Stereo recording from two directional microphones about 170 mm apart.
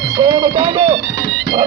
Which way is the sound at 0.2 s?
25° right (ahead or behind).